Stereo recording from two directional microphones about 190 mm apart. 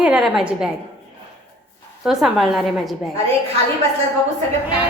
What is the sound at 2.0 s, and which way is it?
Speech, centre (ahead or behind).